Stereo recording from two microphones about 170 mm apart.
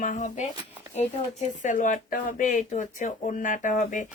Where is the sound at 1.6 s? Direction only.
50° left (ahead or behind).